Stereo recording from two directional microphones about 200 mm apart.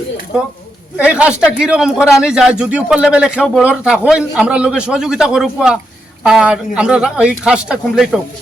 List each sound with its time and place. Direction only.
0.9 s speech: 5° right (ahead or behind)